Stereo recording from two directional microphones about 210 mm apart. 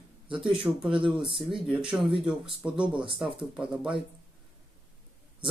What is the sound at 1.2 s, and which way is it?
Speech, 25° right (ahead or behind).